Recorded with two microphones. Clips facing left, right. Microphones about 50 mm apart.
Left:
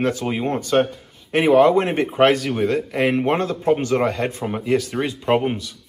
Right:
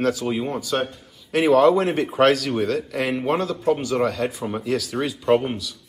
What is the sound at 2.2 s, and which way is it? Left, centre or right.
Speech, centre.